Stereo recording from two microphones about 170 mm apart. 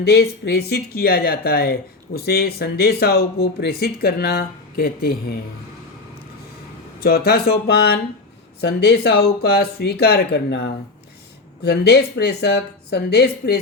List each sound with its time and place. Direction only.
0.0 s speech: 70° left (ahead or behind)
7.0 s speech: 65° left (ahead or behind)